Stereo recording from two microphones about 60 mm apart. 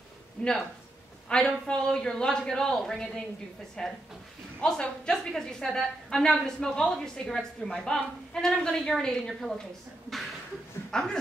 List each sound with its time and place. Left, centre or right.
1.3 s a woman's voice: centre
10.9 s speech: centre